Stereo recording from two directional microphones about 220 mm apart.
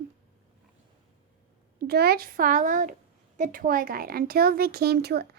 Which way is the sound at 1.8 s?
45° right (ahead or behind).